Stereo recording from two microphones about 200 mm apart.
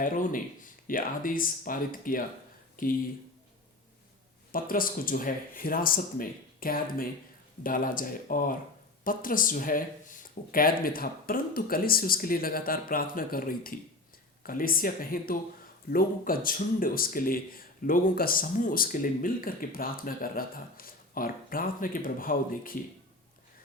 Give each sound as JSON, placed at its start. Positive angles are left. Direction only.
{"t": 0.0, "sound": "speech", "side_deg": 40}
{"t": 4.5, "sound": "speech", "side_deg": 45}